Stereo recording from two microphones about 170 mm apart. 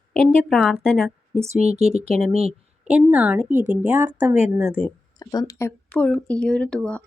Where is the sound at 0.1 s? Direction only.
Centre (ahead or behind).